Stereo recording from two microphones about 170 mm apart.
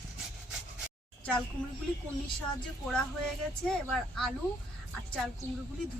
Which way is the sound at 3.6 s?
Centre (ahead or behind).